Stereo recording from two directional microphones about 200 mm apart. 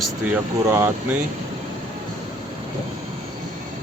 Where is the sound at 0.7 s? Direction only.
15° right (ahead or behind).